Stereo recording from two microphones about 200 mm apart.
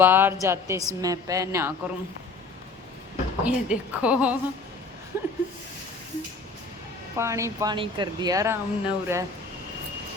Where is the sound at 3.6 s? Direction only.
5° right (ahead or behind).